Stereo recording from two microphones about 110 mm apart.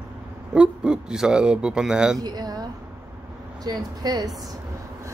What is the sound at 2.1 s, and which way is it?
Speech, 35° right (ahead or behind).